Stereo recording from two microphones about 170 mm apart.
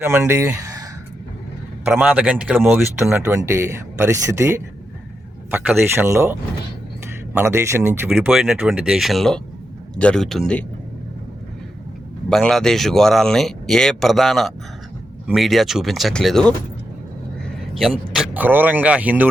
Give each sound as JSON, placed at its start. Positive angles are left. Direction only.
{"t": 0.0, "sound": "speech", "side_deg": -15}
{"t": 2.0, "sound": "speech", "side_deg": -10}
{"t": 7.3, "sound": "speech", "side_deg": -15}
{"t": 8.3, "sound": "speech", "side_deg": 0}
{"t": 12.3, "sound": "speech", "side_deg": 0}
{"t": 17.7, "sound": "speech", "side_deg": 0}